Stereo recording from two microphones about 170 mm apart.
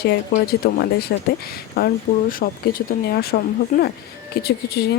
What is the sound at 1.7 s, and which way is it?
Speech, 60° left (ahead or behind).